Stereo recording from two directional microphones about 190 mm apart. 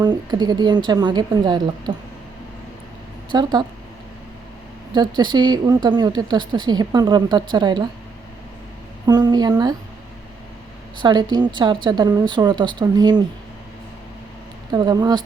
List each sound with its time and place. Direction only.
0.0 s a woman's voice: 25° right (ahead or behind)
3.3 s a woman's voice: 20° right (ahead or behind)
4.9 s a woman's voice: 25° right (ahead or behind)
9.0 s a woman's voice: 25° right (ahead or behind)
11.0 s a woman's voice: 25° right (ahead or behind)
14.7 s a woman's voice: 20° right (ahead or behind)